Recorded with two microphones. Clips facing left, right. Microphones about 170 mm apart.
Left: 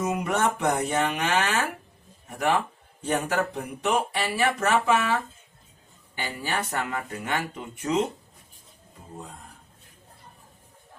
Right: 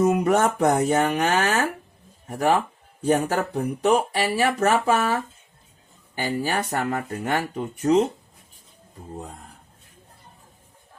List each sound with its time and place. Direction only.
0.0 s speech: 40° right (ahead or behind)
3.0 s speech: 40° right (ahead or behind)
6.1 s speech: 40° right (ahead or behind)